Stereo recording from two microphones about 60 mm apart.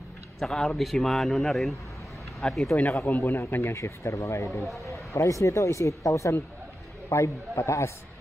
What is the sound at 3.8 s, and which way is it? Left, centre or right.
A man's voice, left.